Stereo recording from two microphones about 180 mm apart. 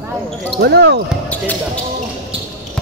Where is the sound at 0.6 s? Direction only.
65° right (ahead or behind).